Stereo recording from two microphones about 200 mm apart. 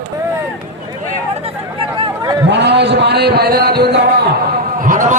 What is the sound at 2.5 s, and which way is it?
A man's voice, 60° right (ahead or behind).